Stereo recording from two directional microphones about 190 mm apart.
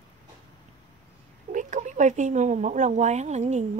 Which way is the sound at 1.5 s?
40° right (ahead or behind).